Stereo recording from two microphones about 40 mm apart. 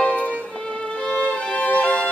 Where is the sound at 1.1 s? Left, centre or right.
Left.